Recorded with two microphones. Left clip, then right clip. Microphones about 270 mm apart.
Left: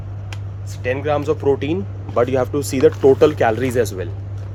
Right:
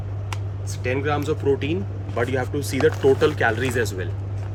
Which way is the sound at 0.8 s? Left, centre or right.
Centre.